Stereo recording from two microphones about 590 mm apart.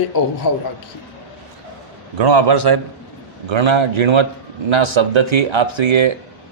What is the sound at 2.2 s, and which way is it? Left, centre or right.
A man's voice, right.